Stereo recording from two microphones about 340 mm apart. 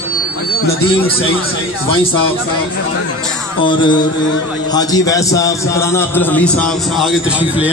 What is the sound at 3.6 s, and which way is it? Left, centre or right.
A man's voice, centre.